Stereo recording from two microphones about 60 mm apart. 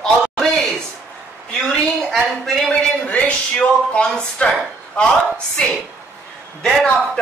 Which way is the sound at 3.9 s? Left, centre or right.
Centre.